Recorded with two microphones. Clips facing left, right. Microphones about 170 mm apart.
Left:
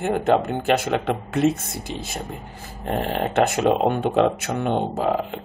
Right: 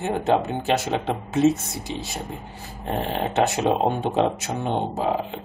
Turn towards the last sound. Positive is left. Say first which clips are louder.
# left 2 dB
turn(degrees=60)  # may be behind; listen again after turning